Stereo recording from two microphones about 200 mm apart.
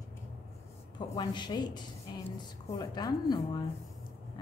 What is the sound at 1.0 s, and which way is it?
A woman's voice, 20° left (ahead or behind).